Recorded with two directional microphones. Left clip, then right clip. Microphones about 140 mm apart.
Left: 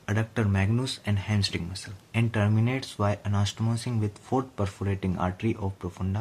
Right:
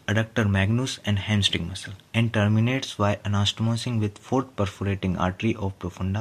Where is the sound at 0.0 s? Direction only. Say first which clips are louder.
Right 5 dB; 30° right (ahead or behind).